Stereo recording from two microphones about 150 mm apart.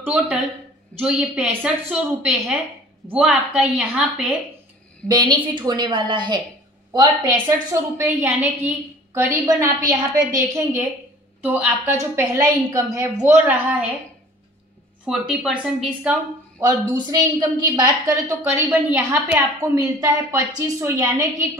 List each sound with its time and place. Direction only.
0.0 s a woman's voice: 10° right (ahead or behind)
5.0 s a woman's voice: 30° right (ahead or behind)
8.0 s a woman's voice: 10° right (ahead or behind)
13.4 s a woman's voice: 10° right (ahead or behind)
15.0 s a woman's voice: 5° right (ahead or behind)
16.6 s a woman's voice: 25° right (ahead or behind)
18.0 s a woman's voice: 15° right (ahead or behind)